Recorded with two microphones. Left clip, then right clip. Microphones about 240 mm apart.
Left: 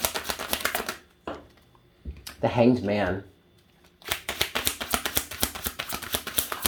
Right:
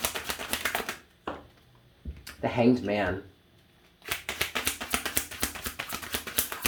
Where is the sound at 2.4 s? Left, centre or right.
Left.